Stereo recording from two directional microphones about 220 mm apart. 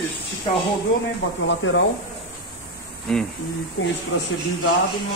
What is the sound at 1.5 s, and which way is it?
Speech, 55° left (ahead or behind).